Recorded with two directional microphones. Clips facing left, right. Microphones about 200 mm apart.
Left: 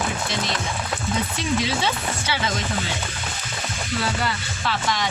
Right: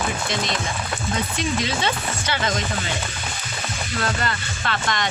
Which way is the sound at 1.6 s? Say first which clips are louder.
Even; 5° left (ahead or behind).